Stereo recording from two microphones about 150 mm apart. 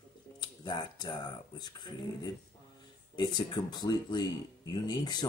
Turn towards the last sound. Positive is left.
turn(degrees=25)  # may be behind; listen again after turning